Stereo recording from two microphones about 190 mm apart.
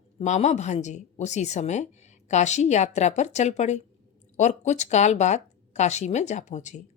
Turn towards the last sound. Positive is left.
turn(degrees=40)  # may be behind; listen again after turning